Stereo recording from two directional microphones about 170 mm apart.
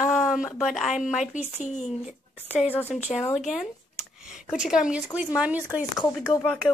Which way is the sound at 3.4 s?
Centre (ahead or behind).